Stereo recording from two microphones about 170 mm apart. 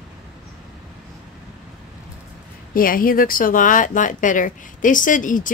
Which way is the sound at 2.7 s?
55° left (ahead or behind).